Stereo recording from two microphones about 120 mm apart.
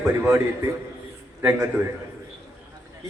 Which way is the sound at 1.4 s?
20° right (ahead or behind).